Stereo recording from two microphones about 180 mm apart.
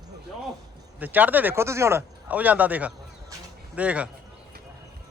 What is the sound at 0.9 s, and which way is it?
Speech, 10° right (ahead or behind).